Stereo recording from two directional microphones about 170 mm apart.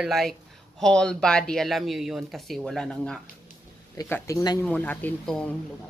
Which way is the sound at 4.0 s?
15° left (ahead or behind).